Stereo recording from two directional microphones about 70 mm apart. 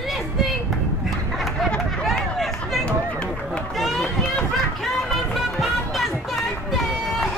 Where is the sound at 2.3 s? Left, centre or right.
Centre.